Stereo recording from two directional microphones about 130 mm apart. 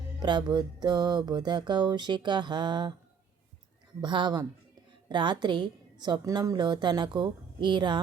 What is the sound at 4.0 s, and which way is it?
A woman's voice, 35° right (ahead or behind).